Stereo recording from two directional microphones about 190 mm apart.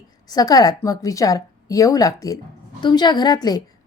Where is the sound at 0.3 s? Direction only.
20° left (ahead or behind).